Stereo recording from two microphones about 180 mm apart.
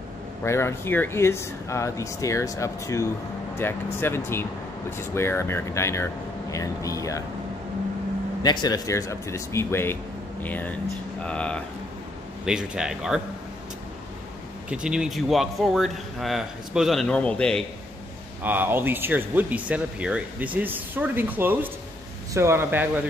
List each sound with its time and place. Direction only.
0.4 s speech: 15° left (ahead or behind)
8.4 s speech: 25° left (ahead or behind); by 11.6 s 5° left (ahead or behind)
12.4 s speech: 5° right (ahead or behind)
14.7 s speech: 5° right (ahead or behind)
18.4 s speech: 10° right (ahead or behind)